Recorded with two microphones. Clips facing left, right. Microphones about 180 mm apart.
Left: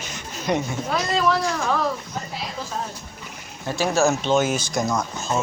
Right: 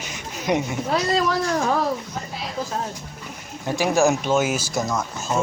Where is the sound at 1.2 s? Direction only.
35° right (ahead or behind).